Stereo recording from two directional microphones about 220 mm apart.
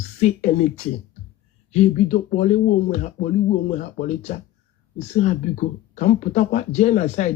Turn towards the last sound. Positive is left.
turn(degrees=35)  # may be behind; listen again after turning